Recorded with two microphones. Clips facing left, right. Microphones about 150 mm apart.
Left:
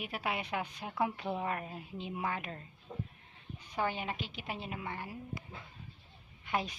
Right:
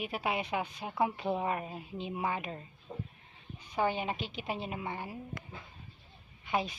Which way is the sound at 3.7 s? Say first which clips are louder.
Right 4 dB; 20° right (ahead or behind).